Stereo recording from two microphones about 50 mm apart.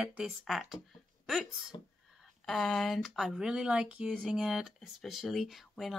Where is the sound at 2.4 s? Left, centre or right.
Centre.